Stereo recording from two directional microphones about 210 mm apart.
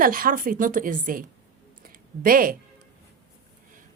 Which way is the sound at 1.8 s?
40° right (ahead or behind).